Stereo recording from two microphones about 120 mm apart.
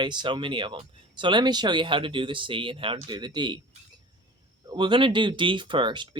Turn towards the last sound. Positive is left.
turn(degrees=-40)  # may be behind; listen again after turning